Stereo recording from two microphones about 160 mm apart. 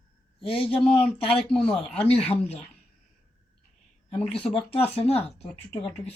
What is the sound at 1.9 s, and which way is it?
Speech, 40° left (ahead or behind).